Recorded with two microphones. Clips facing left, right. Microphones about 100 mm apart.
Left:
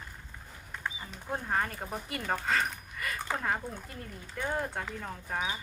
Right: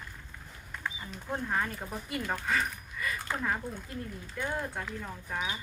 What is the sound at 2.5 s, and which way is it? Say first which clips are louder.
Speech: even; 60° left (ahead or behind).